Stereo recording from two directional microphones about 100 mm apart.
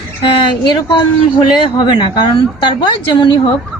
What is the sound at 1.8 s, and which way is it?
Speech, 50° left (ahead or behind).